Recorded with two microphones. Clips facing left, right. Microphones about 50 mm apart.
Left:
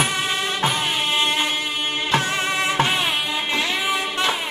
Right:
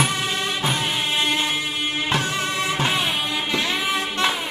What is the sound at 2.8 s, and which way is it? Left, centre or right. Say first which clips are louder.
Music: left 1 dB; centre.